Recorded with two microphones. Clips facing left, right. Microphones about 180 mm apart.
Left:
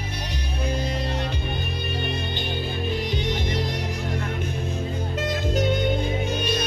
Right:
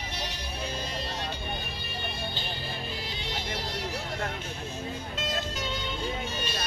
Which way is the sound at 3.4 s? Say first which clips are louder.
Left 7 dB; 15° left (ahead or behind).